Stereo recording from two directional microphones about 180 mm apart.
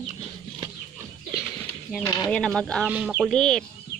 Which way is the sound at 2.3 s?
5° left (ahead or behind).